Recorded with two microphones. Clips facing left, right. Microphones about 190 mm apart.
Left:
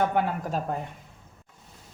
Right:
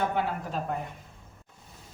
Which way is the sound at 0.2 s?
50° left (ahead or behind).